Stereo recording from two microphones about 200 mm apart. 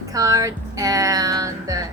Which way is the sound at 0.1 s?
15° right (ahead or behind).